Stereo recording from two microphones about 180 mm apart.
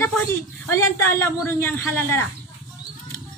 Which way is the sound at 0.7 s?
15° left (ahead or behind).